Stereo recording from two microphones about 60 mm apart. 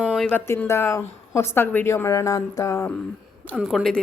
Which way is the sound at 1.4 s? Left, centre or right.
Left.